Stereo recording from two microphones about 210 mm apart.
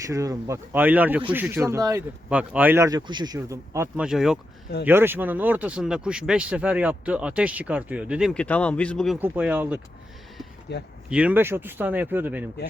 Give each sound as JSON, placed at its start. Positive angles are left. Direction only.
{"t": 0.0, "sound": "speech", "side_deg": -15}
{"t": 9.1, "sound": "speech", "side_deg": -10}
{"t": 10.7, "sound": "speech", "side_deg": 55}
{"t": 11.1, "sound": "speech", "side_deg": -5}